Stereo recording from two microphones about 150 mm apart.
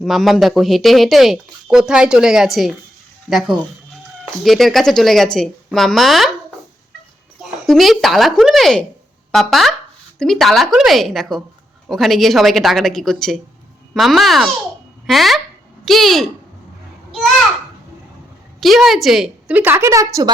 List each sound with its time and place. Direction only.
0.0 s speech: centre (ahead or behind)
7.7 s speech: centre (ahead or behind)
18.6 s a woman's voice: centre (ahead or behind); by 20.3 s 20° right (ahead or behind)